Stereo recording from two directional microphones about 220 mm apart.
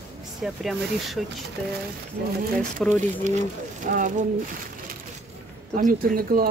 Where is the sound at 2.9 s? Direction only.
30° right (ahead or behind).